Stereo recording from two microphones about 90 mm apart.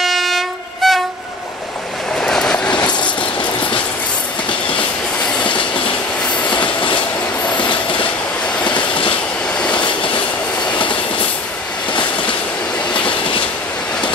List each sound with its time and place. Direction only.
0.0 s train: centre (ahead or behind)
2.1 s train: 5° left (ahead or behind)
2.8 s vehicle: 60° left (ahead or behind)
4.5 s train: 70° left (ahead or behind)
6.5 s train: 65° left (ahead or behind)
11.9 s a sound: 60° left (ahead or behind)
12.9 s train: 70° left (ahead or behind)